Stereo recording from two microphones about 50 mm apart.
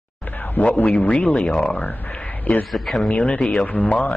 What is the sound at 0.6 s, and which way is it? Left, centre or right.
Speech, left.